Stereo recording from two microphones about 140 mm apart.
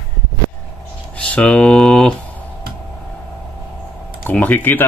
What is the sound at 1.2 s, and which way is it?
Speech, 10° left (ahead or behind).